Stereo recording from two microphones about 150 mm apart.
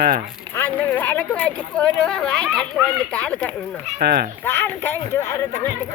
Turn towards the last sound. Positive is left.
turn(degrees=15)  # may be behind; listen again after turning